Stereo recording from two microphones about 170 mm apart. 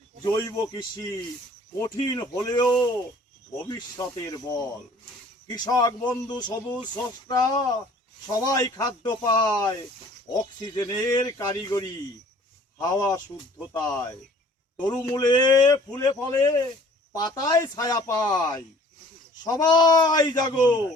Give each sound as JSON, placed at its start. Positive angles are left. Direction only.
{"t": 0.3, "sound": "speech", "side_deg": 25}
{"t": 3.7, "sound": "speech", "side_deg": 20}